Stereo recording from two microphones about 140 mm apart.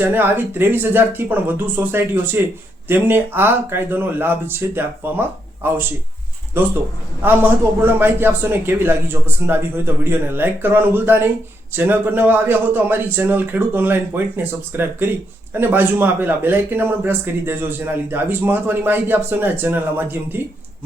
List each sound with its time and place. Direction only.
0.0 s a man's voice: 15° right (ahead or behind)